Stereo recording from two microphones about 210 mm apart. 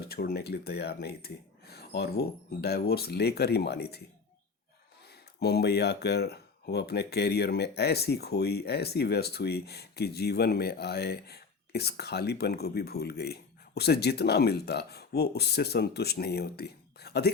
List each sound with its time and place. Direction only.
0.1 s speech: 50° left (ahead or behind)
5.4 s speech: 50° left (ahead or behind)